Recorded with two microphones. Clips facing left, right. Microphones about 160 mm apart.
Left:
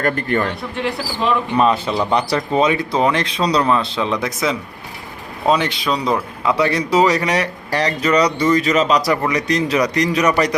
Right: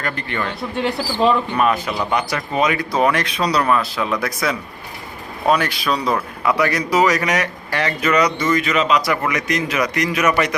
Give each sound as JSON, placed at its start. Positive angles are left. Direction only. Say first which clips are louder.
{"t": 0.0, "sound": "speech", "louder": "left 6 dB", "side_deg": 45}
{"t": 1.5, "sound": "a man's voice", "louder": "left 3 dB", "side_deg": 25}